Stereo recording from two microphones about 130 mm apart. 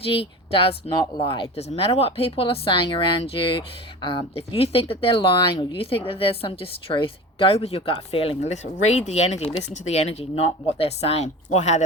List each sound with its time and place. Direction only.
0.0 s speech: 45° left (ahead or behind)
0.9 s speech: 35° left (ahead or behind); by 11.3 s 55° left (ahead or behind)
11.4 s speech: 65° left (ahead or behind)